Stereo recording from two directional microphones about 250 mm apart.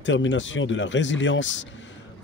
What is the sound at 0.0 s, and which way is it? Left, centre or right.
Speech, left.